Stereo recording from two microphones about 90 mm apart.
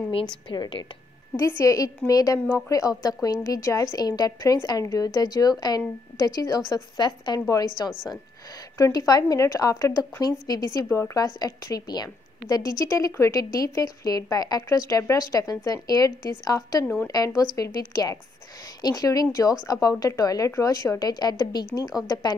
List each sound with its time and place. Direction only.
0.1 s a woman's voice: 65° left (ahead or behind)
1.3 s a woman's voice: 35° left (ahead or behind)
7.0 s a woman's voice: 50° left (ahead or behind)
8.7 s a woman's voice: 40° left (ahead or behind)